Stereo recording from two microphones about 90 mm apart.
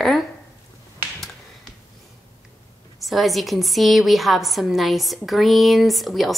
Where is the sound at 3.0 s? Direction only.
Centre (ahead or behind).